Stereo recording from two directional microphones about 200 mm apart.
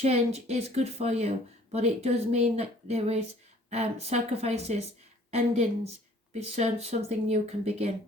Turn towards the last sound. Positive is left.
turn(degrees=-30)  # may be behind; listen again after turning